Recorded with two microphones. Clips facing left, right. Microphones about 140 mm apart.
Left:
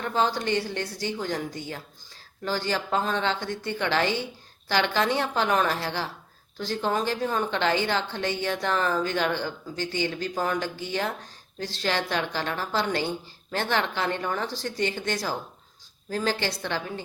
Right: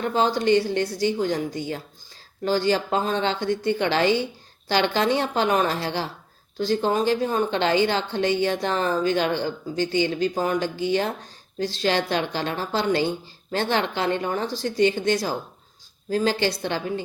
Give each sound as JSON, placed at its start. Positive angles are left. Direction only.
{"t": 0.0, "sound": "speech", "side_deg": -25}